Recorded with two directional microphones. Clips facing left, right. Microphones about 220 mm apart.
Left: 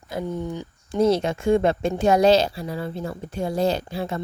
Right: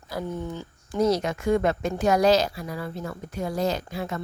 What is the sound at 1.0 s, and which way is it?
Speech, 30° left (ahead or behind).